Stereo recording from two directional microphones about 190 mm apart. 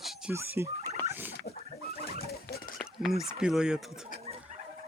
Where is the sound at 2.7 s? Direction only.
Centre (ahead or behind).